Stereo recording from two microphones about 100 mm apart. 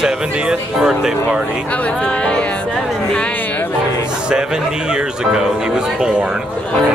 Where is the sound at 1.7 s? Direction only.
15° left (ahead or behind).